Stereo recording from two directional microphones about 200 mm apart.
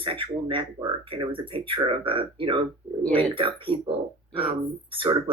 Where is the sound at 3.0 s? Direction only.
10° left (ahead or behind).